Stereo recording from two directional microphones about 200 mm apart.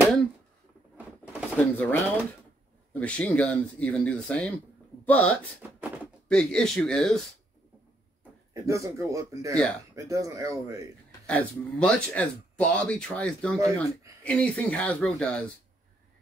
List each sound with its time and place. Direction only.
0.9 s a sound: 10° right (ahead or behind)
1.6 s speech: 10° left (ahead or behind)
5.6 s speech: 10° right (ahead or behind)
6.2 s speech: 5° left (ahead or behind)
8.2 s speech: 15° right (ahead or behind)
11.1 s speech: 5° left (ahead or behind)